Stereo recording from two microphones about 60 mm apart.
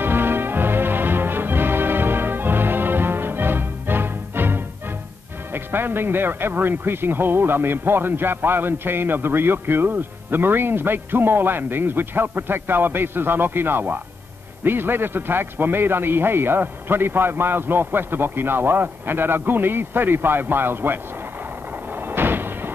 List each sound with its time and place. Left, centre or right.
0.0 s music: right
5.5 s speech: right
21.9 s a sound: right